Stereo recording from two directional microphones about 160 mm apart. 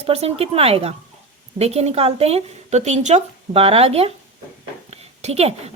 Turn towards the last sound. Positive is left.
turn(degrees=-40)  # may be behind; listen again after turning